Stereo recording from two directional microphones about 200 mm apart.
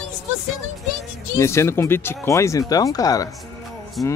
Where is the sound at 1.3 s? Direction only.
15° left (ahead or behind).